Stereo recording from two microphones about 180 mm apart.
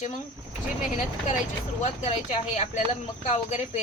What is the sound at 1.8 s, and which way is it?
A woman's voice, 35° left (ahead or behind).